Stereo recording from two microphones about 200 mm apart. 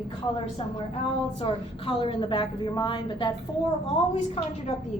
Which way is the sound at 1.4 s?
25° left (ahead or behind).